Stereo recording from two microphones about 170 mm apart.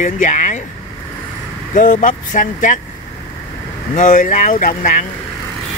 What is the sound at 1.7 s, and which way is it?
Speech, 50° left (ahead or behind).